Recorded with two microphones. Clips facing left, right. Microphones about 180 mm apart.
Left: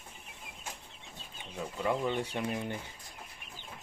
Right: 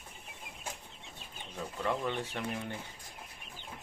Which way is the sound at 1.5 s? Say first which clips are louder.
Left 2 dB; 10° left (ahead or behind).